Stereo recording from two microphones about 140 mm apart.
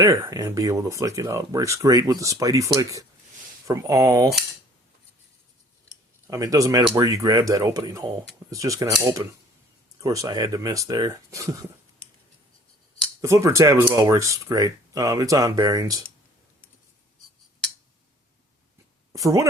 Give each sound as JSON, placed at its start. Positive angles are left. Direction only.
{"t": 0.0, "sound": "speech", "side_deg": -25}
{"t": 6.2, "sound": "speech", "side_deg": -25}
{"t": 13.2, "sound": "speech", "side_deg": -20}
{"t": 19.1, "sound": "speech", "side_deg": -25}